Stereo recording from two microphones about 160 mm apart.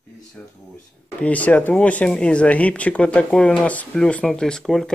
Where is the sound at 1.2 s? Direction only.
10° left (ahead or behind).